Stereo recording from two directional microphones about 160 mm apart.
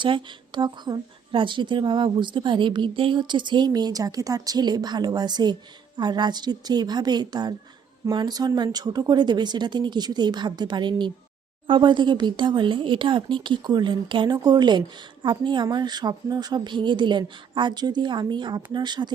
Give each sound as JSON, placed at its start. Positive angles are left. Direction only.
{"t": 0.0, "sound": "speech", "side_deg": -30}